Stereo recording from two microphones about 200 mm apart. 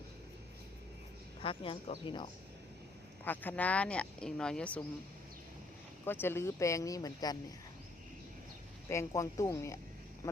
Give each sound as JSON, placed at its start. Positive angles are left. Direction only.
{"t": 1.4, "sound": "speech", "side_deg": 25}
{"t": 3.2, "sound": "speech", "side_deg": 10}
{"t": 6.1, "sound": "speech", "side_deg": 10}
{"t": 8.9, "sound": "speech", "side_deg": 15}